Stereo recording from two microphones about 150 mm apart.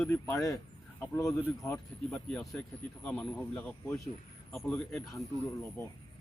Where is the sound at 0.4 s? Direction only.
20° left (ahead or behind).